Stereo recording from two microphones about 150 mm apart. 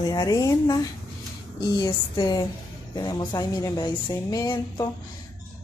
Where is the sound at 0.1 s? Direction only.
25° left (ahead or behind).